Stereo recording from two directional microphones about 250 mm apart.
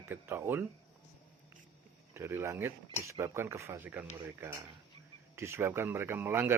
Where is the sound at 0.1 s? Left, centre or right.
Centre.